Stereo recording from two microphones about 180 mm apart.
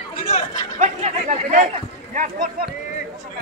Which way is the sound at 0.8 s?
40° right (ahead or behind).